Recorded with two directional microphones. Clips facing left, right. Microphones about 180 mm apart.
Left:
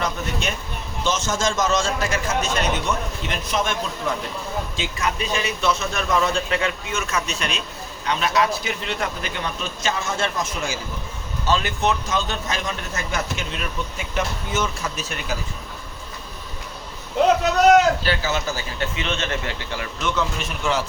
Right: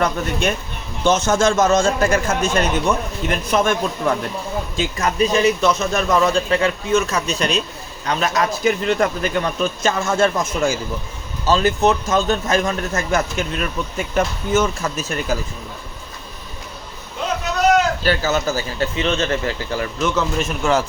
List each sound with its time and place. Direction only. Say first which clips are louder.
0.0 s a man's voice: right 6 dB; 55° right (ahead or behind)
18.0 s a man's voice: right 5 dB; 45° right (ahead or behind)